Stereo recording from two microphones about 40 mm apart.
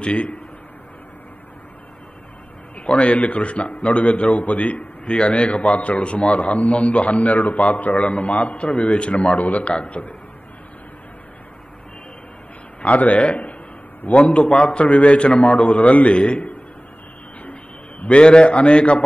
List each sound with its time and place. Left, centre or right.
0.0 s a man's voice: left
2.8 s a man's voice: left
12.8 s a man's voice: left
14.1 s a man's voice: left
18.0 s a man's voice: left